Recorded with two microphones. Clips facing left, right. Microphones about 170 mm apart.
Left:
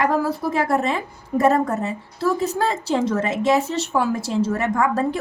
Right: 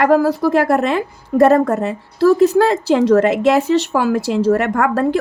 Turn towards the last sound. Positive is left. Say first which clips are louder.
# right 4 dB
turn(degrees=-70)  # may be behind; listen again after turning